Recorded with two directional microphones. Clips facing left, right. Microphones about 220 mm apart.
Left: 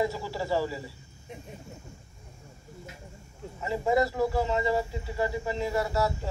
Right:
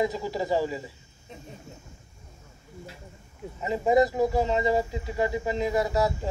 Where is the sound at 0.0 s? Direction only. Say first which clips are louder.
Right 3 dB; 15° right (ahead or behind).